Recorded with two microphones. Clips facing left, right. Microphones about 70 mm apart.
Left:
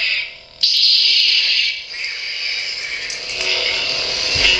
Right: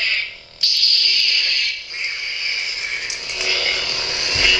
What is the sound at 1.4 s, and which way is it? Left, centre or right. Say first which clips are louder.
Frog: left 2 dB; right.